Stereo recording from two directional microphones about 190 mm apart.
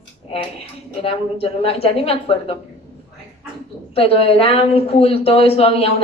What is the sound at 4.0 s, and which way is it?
A woman's voice, 30° left (ahead or behind).